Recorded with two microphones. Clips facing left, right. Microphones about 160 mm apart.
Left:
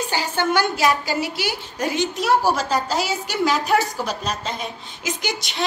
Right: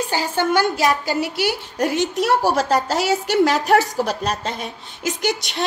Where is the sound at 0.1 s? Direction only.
45° right (ahead or behind).